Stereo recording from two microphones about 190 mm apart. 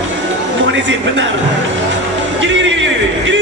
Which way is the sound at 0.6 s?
70° right (ahead or behind).